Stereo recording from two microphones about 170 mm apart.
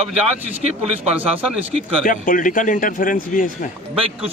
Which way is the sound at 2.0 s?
55° left (ahead or behind).